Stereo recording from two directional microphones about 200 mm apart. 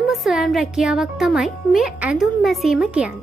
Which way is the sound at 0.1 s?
Centre (ahead or behind).